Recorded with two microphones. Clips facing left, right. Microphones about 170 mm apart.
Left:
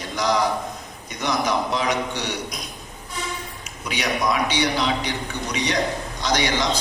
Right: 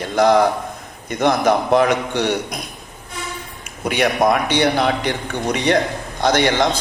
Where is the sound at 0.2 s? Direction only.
55° right (ahead or behind).